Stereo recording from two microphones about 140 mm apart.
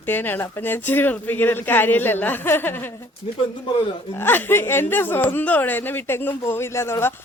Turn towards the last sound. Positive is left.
turn(degrees=20)  # may be behind; listen again after turning